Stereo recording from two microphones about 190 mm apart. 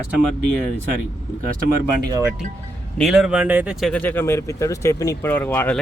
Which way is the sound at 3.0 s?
Centre (ahead or behind).